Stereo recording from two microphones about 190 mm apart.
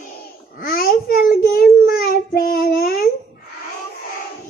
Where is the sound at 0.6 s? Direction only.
50° left (ahead or behind).